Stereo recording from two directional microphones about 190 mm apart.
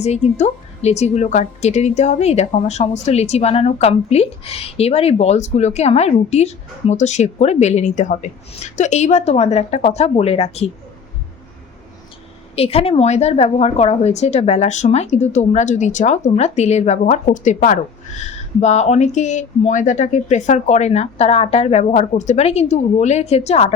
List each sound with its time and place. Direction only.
0.0 s a woman's voice: 35° left (ahead or behind)
12.5 s a woman's voice: 30° left (ahead or behind)